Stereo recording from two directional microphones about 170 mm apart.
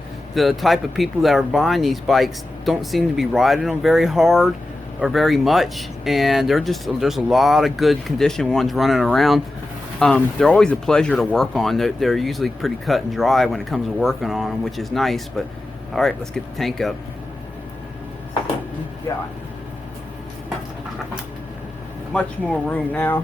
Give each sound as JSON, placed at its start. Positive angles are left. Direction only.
{"t": 0.3, "sound": "speech", "side_deg": 0}
{"t": 19.1, "sound": "speech", "side_deg": 20}
{"t": 22.1, "sound": "speech", "side_deg": 5}